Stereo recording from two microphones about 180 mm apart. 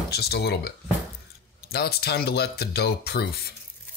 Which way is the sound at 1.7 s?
60° left (ahead or behind).